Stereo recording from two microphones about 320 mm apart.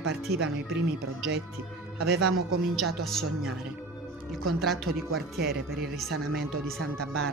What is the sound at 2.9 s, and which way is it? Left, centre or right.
Speech, centre.